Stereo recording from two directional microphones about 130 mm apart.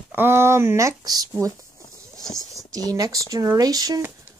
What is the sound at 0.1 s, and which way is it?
Speech, 20° right (ahead or behind).